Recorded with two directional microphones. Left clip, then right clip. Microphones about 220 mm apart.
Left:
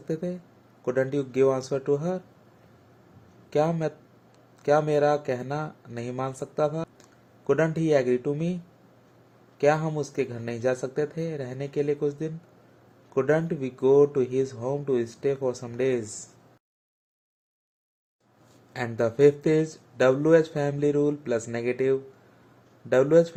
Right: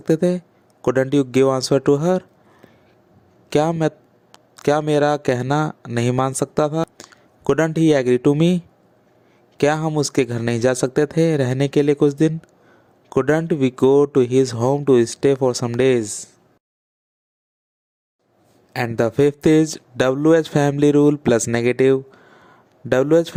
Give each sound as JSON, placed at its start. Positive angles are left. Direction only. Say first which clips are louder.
{"t": 0.0, "sound": "speech", "louder": "right 13 dB", "side_deg": -45}
{"t": 3.5, "sound": "speech", "louder": "right 7 dB", "side_deg": -45}
{"t": 18.7, "sound": "speech", "louder": "right 7 dB", "side_deg": -40}